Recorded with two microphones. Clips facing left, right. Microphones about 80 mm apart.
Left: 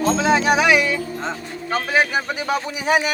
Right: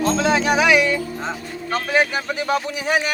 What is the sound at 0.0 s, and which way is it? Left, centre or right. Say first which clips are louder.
Speech: left 1 dB; centre.